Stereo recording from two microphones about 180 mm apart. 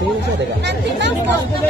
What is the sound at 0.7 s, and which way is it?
Speech, 80° right.